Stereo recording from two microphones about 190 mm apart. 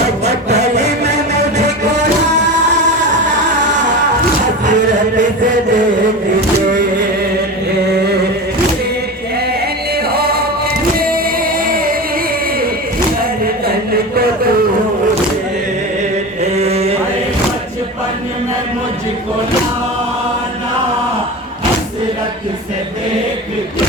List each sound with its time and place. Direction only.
0.3 s music: 35° right (ahead or behind)
4.6 s music: 40° right (ahead or behind)
10.1 s music: 55° right (ahead or behind)
11.6 s music: 50° right (ahead or behind)
16.4 s chant: 35° right (ahead or behind)